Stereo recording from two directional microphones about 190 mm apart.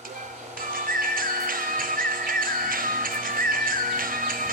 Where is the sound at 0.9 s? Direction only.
45° right (ahead or behind).